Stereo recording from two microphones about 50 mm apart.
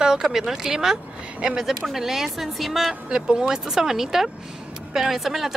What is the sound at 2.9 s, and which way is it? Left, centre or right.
A woman's voice, centre.